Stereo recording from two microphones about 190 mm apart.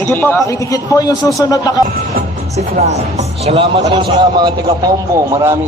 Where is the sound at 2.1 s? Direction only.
40° right (ahead or behind).